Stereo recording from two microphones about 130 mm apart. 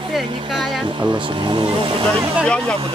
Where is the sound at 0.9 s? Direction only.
35° right (ahead or behind).